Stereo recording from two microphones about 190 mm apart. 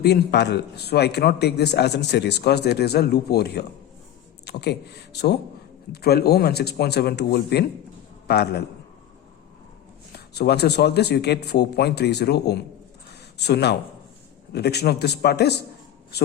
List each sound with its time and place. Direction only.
0.0 s speech: 60° left (ahead or behind)
10.3 s speech: 60° left (ahead or behind)
13.1 s a sound: 60° left (ahead or behind)
14.5 s speech: 60° left (ahead or behind)